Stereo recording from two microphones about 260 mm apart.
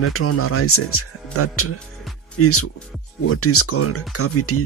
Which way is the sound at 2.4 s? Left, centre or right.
Left.